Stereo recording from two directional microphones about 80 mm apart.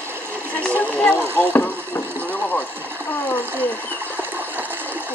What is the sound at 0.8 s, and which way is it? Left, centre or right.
Speech, centre.